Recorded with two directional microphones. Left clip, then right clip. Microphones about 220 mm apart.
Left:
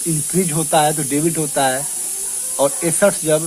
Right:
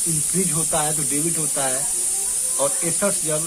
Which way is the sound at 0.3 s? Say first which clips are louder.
Left 9 dB; 40° left (ahead or behind).